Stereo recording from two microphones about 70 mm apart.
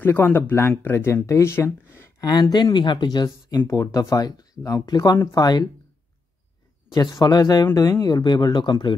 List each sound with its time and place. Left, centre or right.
0.0 s speech: left
2.5 s speech: left
3.6 s speech: left
6.9 s speech: left